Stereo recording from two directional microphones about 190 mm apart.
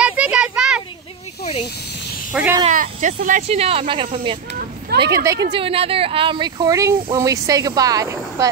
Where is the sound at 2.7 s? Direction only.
40° right (ahead or behind).